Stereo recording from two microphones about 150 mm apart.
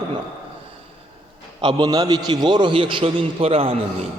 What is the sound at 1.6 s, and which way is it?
A man's voice, 25° right (ahead or behind).